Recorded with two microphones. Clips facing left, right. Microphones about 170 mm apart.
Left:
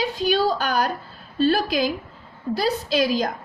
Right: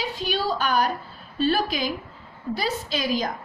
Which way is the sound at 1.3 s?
40° left (ahead or behind).